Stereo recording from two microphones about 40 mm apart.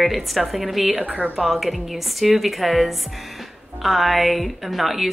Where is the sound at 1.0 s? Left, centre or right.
Right.